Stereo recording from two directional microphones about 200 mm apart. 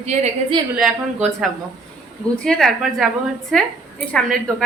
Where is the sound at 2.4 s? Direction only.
5° left (ahead or behind).